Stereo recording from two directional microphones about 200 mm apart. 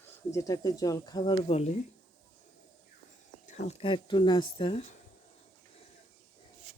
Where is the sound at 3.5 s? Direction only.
35° left (ahead or behind).